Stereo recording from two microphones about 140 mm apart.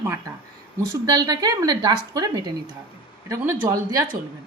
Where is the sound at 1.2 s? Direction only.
30° right (ahead or behind).